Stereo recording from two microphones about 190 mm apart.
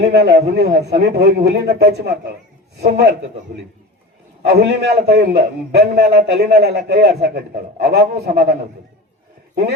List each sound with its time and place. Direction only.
0.0 s a man's voice: 60° right (ahead or behind)
4.4 s a man's voice: 60° right (ahead or behind)